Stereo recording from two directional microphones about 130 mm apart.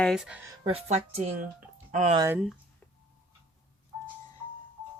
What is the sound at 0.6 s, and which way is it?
Speech, 50° right (ahead or behind).